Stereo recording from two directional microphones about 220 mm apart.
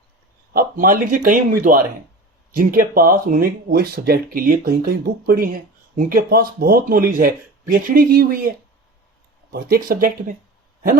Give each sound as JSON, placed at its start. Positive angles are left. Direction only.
{"t": 0.5, "sound": "speech", "side_deg": -40}
{"t": 9.5, "sound": "speech", "side_deg": -40}